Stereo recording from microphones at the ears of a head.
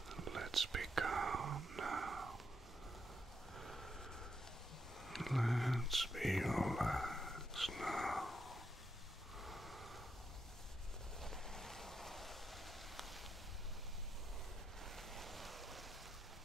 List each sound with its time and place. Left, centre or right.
0.1 s whispering: right
5.1 s whispering: centre
11.2 s waves: centre